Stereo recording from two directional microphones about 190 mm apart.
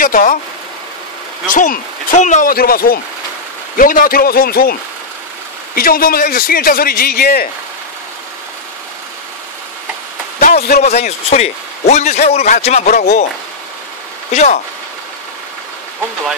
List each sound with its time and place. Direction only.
0.0 s a man's voice: 45° left (ahead or behind)
1.5 s a man's voice: 45° left (ahead or behind)
5.8 s a man's voice: 50° left (ahead or behind)
10.4 s a sound: 50° left (ahead or behind)
10.8 s a man's voice: 35° left (ahead or behind)
14.3 s a man's voice: 40° left (ahead or behind)